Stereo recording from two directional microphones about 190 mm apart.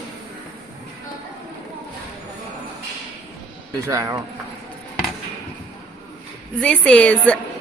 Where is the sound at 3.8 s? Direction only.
15° right (ahead or behind).